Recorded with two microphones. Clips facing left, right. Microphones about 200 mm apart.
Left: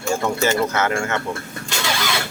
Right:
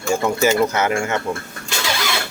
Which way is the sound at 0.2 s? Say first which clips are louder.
Right 4 dB; 10° right (ahead or behind).